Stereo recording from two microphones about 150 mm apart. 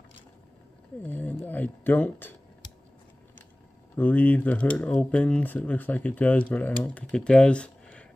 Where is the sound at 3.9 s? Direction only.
10° left (ahead or behind).